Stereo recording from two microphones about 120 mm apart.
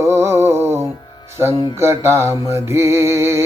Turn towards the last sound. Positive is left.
turn(degrees=-20)  # may be behind; listen again after turning